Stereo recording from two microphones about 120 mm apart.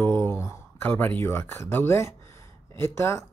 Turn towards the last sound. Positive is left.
turn(degrees=20)  # may be behind; listen again after turning